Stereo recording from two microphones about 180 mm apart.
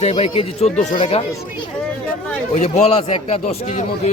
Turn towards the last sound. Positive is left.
turn(degrees=35)  # may be behind; listen again after turning